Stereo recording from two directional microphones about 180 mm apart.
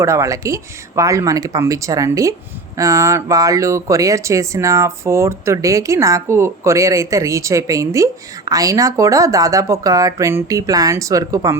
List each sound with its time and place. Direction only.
0.0 s speech: 15° right (ahead or behind)